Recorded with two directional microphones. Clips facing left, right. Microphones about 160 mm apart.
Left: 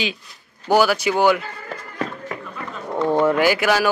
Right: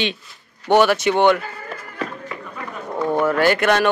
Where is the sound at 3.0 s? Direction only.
25° left (ahead or behind).